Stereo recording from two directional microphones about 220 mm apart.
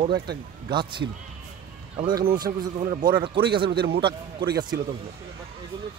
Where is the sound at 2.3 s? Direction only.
20° right (ahead or behind).